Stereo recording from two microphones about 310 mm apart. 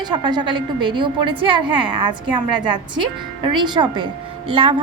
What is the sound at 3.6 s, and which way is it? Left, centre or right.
A woman's voice, centre.